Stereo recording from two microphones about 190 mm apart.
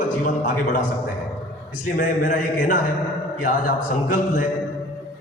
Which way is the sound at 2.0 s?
45° left (ahead or behind).